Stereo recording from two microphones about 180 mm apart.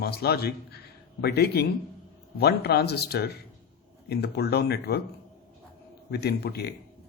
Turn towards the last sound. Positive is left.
turn(degrees=65)  # may be behind; listen again after turning